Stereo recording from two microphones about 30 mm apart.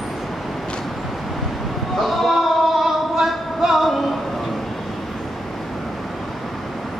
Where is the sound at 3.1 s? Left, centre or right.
Centre.